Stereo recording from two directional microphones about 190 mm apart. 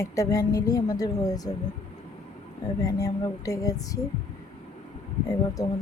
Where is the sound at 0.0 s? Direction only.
15° left (ahead or behind).